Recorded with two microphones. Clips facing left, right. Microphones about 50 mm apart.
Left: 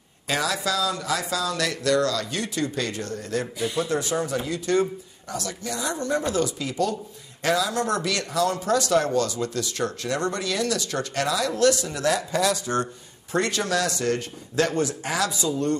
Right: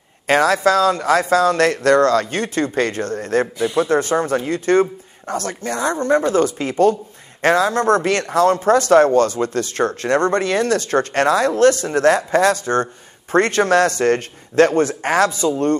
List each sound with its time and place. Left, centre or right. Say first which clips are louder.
0.3 s speech: right 11 dB; right